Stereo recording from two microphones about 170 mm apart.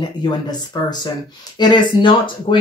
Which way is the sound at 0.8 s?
25° left (ahead or behind).